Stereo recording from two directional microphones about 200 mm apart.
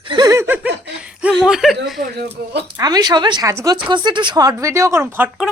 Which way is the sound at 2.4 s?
50° right (ahead or behind).